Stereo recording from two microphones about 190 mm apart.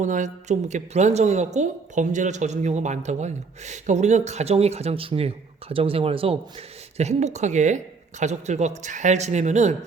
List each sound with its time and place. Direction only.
0.0 s a woman's voice: 40° right (ahead or behind)